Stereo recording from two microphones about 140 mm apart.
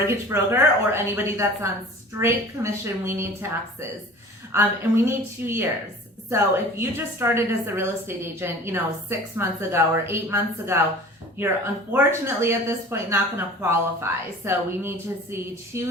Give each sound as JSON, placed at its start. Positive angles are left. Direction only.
{"t": 0.1, "sound": "a woman's voice", "side_deg": -20}